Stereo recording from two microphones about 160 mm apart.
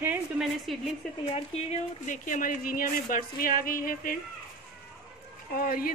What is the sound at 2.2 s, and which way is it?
Speech, 60° left (ahead or behind).